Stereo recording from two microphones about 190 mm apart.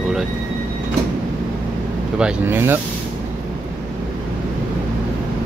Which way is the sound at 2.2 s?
10° right (ahead or behind).